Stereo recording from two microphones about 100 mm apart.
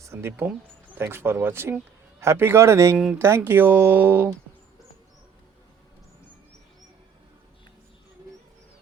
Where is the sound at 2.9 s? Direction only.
10° right (ahead or behind).